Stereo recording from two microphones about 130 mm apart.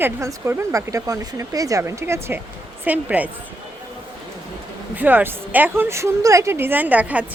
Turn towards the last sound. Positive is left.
turn(degrees=-10)  # may be behind; listen again after turning